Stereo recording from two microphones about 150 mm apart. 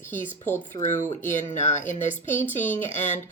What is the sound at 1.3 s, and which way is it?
Speech, 55° left (ahead or behind).